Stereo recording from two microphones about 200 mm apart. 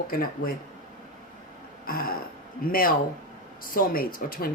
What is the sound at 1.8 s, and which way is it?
Throat clearing, 45° left (ahead or behind).